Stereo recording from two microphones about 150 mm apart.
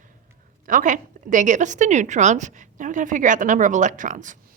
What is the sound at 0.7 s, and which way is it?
A woman's voice, 60° right (ahead or behind).